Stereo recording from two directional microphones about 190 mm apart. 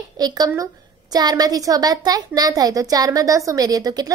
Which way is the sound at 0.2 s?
20° right (ahead or behind).